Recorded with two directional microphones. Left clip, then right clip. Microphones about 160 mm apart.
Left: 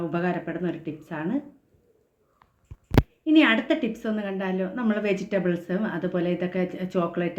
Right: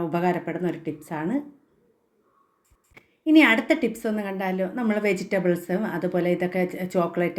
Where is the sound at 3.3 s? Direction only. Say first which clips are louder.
Right 3 dB; 30° right (ahead or behind).